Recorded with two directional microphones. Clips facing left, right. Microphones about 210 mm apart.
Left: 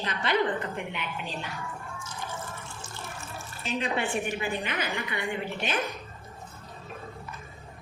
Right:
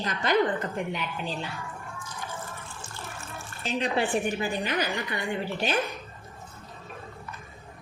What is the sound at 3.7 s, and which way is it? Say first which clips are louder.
A woman's voice: right 3 dB; 35° right (ahead or behind).